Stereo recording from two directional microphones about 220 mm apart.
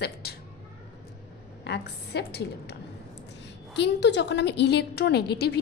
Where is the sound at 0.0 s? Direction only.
45° left (ahead or behind).